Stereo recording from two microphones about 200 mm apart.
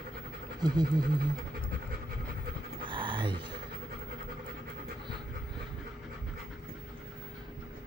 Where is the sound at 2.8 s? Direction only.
25° right (ahead or behind).